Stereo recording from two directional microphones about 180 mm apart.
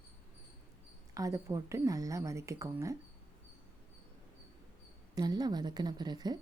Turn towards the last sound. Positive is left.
turn(degrees=-25)  # may be behind; listen again after turning